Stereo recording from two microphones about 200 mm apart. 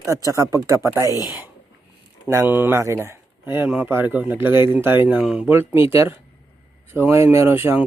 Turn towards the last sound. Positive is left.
turn(degrees=-10)  # may be behind; listen again after turning